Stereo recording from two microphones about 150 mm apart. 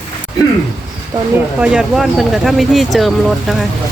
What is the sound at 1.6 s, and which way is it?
Speech, 5° right (ahead or behind).